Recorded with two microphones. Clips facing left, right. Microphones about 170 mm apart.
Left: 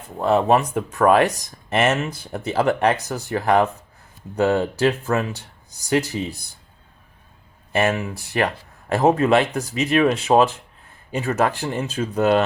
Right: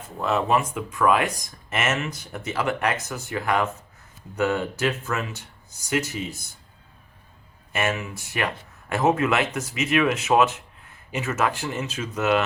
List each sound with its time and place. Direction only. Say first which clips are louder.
0.2 s speech: left 5 dB; 35° left (ahead or behind)
7.7 s speech: left 6 dB; 35° left (ahead or behind)